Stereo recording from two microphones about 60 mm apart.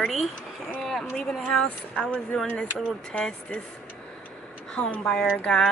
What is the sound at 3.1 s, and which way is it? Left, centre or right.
Speech, centre.